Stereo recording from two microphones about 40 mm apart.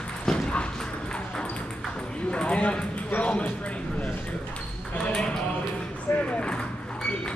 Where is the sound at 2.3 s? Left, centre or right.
Left.